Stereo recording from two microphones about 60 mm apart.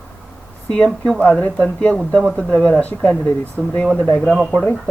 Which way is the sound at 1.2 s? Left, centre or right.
Left.